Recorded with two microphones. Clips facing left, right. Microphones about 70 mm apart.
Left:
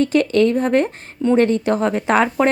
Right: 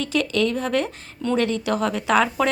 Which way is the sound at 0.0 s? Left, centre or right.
Left.